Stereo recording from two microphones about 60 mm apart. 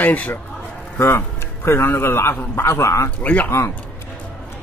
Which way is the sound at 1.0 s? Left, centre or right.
Left.